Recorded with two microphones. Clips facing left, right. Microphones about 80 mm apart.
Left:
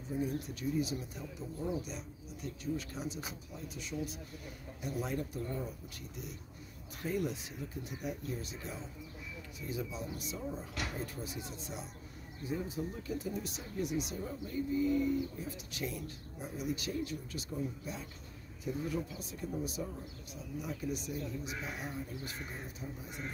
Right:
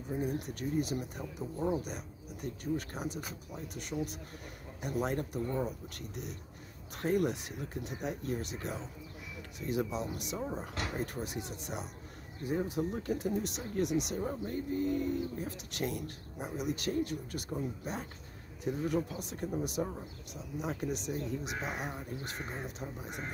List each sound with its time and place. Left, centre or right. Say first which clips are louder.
0.2 s speech: even; right
14.2 s speech: right 2 dB; right
20.6 s speech: right 4 dB; right
21.6 s speech: right 3 dB; right